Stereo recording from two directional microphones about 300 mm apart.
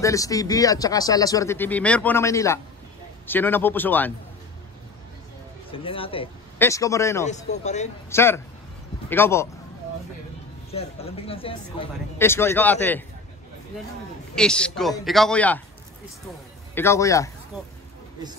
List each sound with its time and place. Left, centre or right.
0.0 s speech: centre
5.7 s speech: centre
7.2 s speech: left
8.1 s speech: centre
10.7 s speech: centre
12.2 s speech: centre
14.3 s a man's voice: centre
16.7 s speech: centre